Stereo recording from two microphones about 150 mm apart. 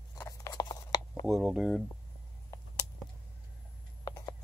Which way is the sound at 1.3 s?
5° right (ahead or behind).